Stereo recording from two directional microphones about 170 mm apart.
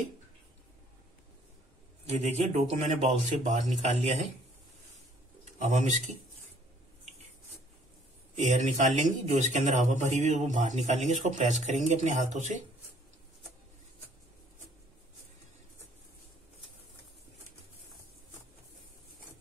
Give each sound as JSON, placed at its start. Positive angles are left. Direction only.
{"t": 2.0, "sound": "a man's voice", "side_deg": -40}
{"t": 5.4, "sound": "speech", "side_deg": -45}
{"t": 8.4, "sound": "a man's voice", "side_deg": -40}